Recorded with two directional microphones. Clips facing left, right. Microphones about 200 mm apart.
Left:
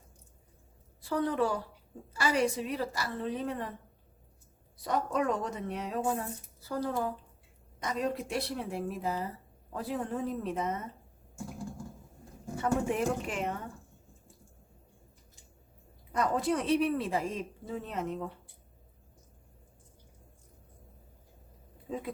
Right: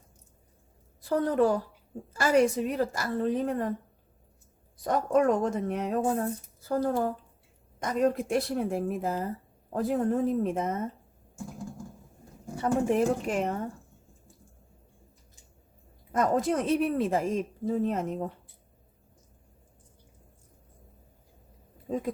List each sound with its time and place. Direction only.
1.0 s speech: 45° right (ahead or behind)
4.8 s speech: 50° right (ahead or behind)
12.5 s a woman's voice: 40° right (ahead or behind)
16.1 s speech: 45° right (ahead or behind)
21.9 s speech: 45° right (ahead or behind)